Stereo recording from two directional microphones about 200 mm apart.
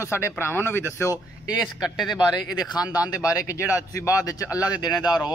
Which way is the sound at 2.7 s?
20° left (ahead or behind).